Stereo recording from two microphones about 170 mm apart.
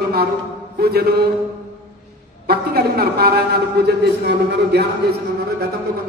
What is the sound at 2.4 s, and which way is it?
A man's voice, 65° right (ahead or behind).